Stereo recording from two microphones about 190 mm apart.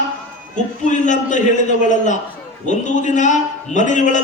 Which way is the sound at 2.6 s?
40° left (ahead or behind).